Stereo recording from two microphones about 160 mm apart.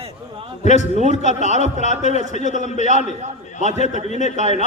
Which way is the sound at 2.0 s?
45° left (ahead or behind).